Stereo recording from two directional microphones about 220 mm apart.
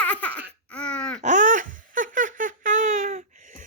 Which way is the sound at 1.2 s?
35° right (ahead or behind).